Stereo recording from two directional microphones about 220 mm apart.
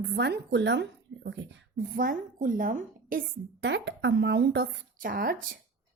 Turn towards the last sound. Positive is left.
turn(degrees=-40)  # may be behind; listen again after turning